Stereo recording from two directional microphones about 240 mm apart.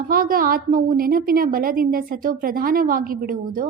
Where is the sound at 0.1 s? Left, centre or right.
Right.